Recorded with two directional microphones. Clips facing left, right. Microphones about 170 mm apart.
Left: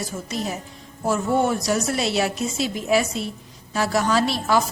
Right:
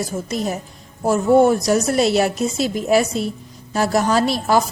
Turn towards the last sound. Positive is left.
turn(degrees=-40)  # may be behind; listen again after turning